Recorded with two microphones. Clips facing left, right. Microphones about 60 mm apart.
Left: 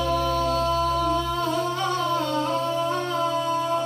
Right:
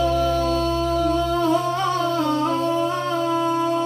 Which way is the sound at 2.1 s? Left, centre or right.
Centre.